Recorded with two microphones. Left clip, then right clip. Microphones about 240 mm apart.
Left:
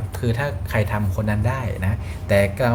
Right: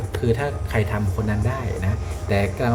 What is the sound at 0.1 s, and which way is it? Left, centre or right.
Speech, centre.